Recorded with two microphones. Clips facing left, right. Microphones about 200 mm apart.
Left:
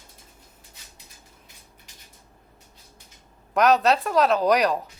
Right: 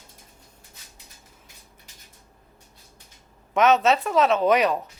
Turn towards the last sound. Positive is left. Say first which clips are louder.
# even
turn(degrees=0)  # may be behind; listen again after turning